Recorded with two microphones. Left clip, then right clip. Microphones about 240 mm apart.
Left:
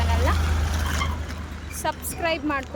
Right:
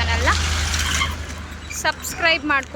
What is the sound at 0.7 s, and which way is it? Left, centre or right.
Mechanisms, centre.